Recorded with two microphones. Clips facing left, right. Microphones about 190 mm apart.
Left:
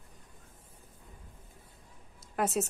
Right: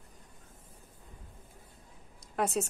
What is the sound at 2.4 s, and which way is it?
Speech, 5° left (ahead or behind).